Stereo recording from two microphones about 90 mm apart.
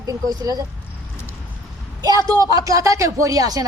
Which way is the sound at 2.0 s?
45° right (ahead or behind).